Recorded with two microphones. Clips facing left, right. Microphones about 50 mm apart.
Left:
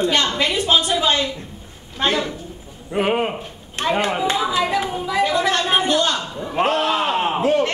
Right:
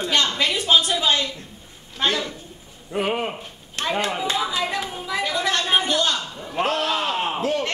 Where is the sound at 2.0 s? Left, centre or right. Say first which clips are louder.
Left 3 dB; centre.